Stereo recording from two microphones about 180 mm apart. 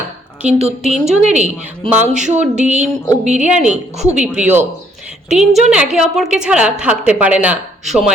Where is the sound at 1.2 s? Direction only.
40° right (ahead or behind).